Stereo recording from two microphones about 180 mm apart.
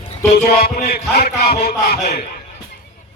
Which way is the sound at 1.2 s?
60° left (ahead or behind).